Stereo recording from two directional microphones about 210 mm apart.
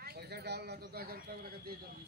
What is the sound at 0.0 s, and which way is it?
A man's voice, 50° right (ahead or behind).